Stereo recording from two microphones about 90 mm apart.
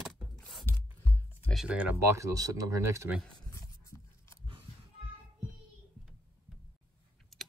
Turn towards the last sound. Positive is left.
turn(degrees=0)  # may be behind; listen again after turning